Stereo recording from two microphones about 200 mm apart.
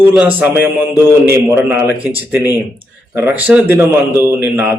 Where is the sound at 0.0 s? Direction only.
5° right (ahead or behind).